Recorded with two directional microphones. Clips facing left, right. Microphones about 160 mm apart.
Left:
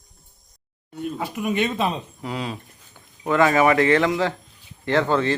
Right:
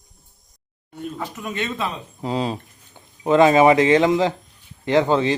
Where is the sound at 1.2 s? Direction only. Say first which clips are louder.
Left 6 dB; 15° left (ahead or behind).